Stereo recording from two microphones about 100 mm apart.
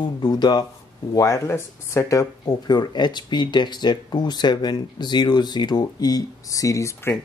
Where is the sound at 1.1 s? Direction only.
35° left (ahead or behind).